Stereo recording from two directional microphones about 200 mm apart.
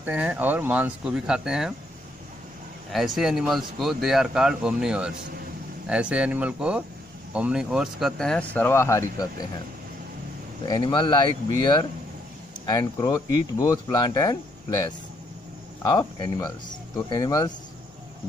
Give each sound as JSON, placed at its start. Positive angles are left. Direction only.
{"t": 0.0, "sound": "speech", "side_deg": -10}
{"t": 2.9, "sound": "speech", "side_deg": 0}
{"t": 10.6, "sound": "speech", "side_deg": 20}
{"t": 12.6, "sound": "speech", "side_deg": 20}